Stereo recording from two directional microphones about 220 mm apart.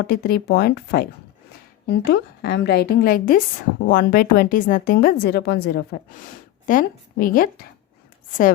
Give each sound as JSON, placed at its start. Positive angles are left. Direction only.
{"t": 0.1, "sound": "a woman's voice", "side_deg": 45}